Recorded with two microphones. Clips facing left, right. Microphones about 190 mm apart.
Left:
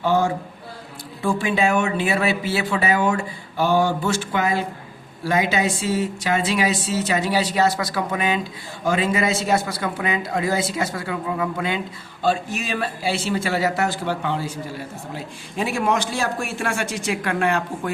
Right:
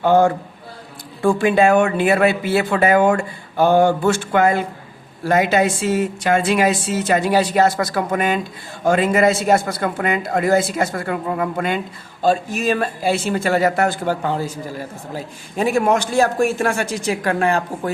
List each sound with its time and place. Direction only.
0.0 s a man's voice: 55° right (ahead or behind); by 17.9 s 40° right (ahead or behind)